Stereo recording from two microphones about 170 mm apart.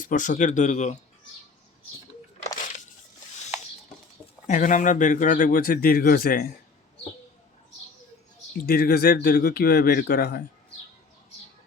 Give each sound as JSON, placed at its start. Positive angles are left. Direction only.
{"t": 0.0, "sound": "speech", "side_deg": 50}
{"t": 4.4, "sound": "speech", "side_deg": 50}
{"t": 8.6, "sound": "speech", "side_deg": 60}